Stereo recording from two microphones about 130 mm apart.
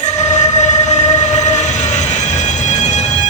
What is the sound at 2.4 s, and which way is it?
Music, 65° left (ahead or behind).